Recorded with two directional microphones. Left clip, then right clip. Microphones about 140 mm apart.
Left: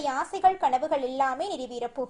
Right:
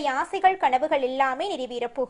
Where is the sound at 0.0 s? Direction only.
15° right (ahead or behind).